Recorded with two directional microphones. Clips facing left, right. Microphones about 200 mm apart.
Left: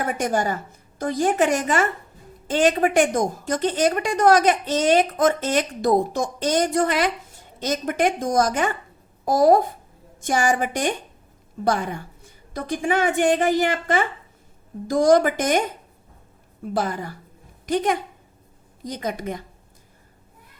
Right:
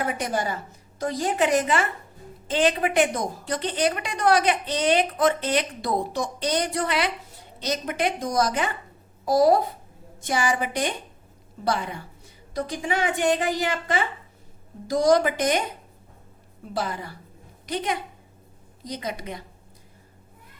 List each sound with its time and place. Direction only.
0.1 s a woman's voice: 45° left (ahead or behind)
16.7 s a woman's voice: 45° left (ahead or behind)